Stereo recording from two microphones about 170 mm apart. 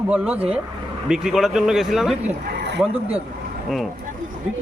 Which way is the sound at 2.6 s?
80° right.